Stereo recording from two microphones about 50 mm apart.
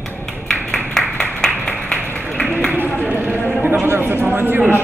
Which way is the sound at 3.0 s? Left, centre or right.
Right.